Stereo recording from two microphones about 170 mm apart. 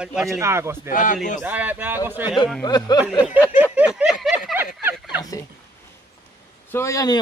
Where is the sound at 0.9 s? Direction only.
50° left (ahead or behind).